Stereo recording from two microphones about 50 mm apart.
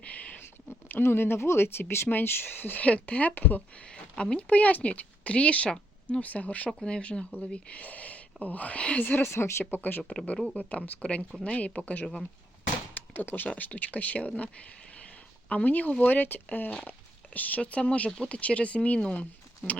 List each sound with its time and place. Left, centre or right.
0.0 s a sound: left
0.7 s speech: left
2.0 s speech: left
2.8 s speech: left
4.2 s speech: left
9.2 s speech: left
9.7 s speech: left
10.3 s speech: centre
10.6 s speech: left
12.9 s a sound: left
13.5 s speech: left